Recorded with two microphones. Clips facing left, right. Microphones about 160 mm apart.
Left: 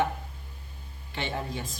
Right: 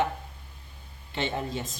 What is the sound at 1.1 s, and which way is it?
Speech, 20° right (ahead or behind).